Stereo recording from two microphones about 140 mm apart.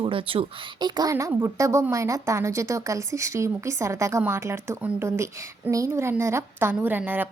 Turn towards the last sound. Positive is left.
turn(degrees=-15)  # may be behind; listen again after turning